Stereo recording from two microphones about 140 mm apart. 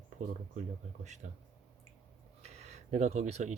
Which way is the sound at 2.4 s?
50° right (ahead or behind).